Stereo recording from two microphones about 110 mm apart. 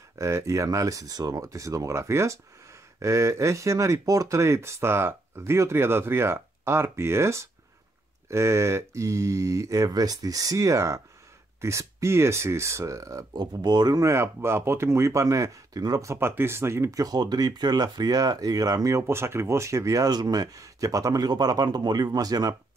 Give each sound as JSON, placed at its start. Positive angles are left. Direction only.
{"t": 0.2, "sound": "speech", "side_deg": -25}
{"t": 13.3, "sound": "speech", "side_deg": -40}